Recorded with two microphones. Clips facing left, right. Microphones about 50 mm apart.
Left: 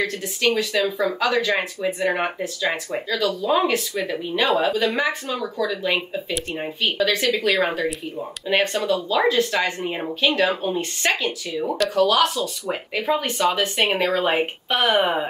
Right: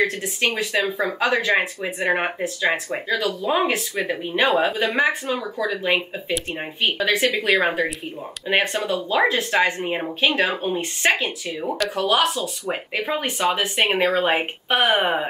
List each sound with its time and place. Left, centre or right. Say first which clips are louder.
0.0 s speech: right 1 dB; right
10.2 s speech: left 1 dB; right
11.6 s speech: left 2 dB; centre
11.9 s speech: left 2 dB; right